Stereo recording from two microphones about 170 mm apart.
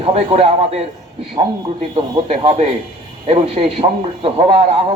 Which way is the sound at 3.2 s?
35° right (ahead or behind).